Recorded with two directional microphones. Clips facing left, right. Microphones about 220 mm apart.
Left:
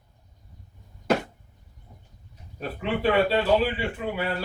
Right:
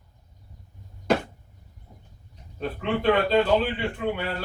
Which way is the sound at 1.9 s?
20° right (ahead or behind).